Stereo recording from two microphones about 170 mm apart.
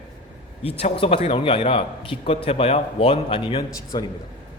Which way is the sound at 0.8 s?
35° left (ahead or behind).